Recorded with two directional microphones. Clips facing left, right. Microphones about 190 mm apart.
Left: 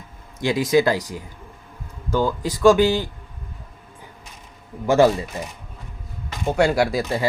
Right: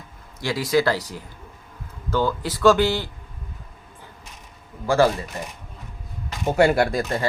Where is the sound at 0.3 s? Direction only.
20° left (ahead or behind).